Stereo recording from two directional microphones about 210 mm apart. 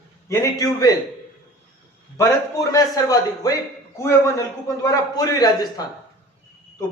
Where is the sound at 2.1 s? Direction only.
15° left (ahead or behind).